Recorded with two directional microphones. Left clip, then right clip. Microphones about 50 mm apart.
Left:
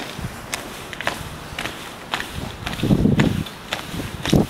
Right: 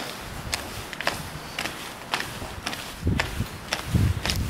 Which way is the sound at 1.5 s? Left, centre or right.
Centre.